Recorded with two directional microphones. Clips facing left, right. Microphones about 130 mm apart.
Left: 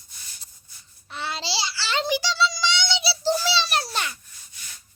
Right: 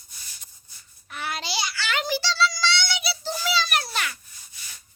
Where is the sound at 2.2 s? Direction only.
20° left (ahead or behind).